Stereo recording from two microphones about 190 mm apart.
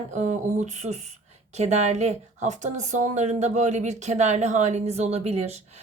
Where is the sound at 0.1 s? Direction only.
40° right (ahead or behind).